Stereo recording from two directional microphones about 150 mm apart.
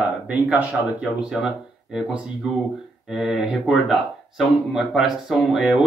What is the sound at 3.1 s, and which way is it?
Speech, centre (ahead or behind).